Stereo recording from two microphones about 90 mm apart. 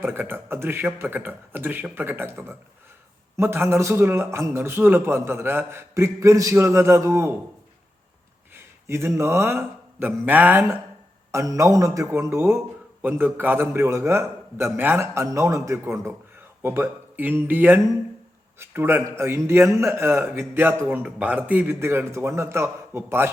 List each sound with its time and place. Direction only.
0.0 s a man's voice: 25° right (ahead or behind)
8.5 s a man's voice: 30° right (ahead or behind)
11.3 s a man's voice: 35° right (ahead or behind)